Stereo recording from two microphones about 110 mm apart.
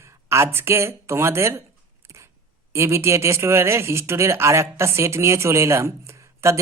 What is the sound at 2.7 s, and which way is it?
Speech, 25° right (ahead or behind).